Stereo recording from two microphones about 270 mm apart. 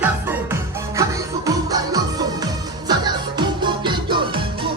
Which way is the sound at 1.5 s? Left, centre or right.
Centre.